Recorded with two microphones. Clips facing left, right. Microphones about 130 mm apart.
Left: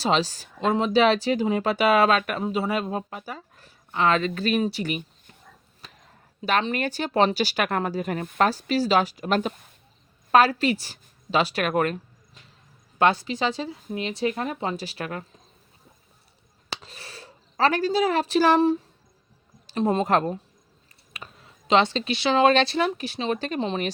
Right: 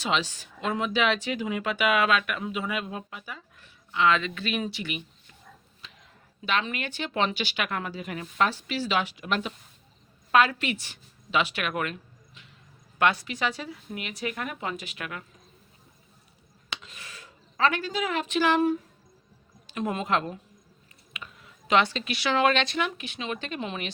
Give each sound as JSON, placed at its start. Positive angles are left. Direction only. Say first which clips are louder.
{"t": 0.0, "sound": "a woman's voice", "louder": "left 5 dB", "side_deg": 35}
{"t": 16.6, "sound": "speech", "louder": "left 3 dB", "side_deg": 35}
{"t": 21.1, "sound": "a sound", "louder": "left 1 dB", "side_deg": 35}
{"t": 21.7, "sound": "speech", "louder": "left 3 dB", "side_deg": 25}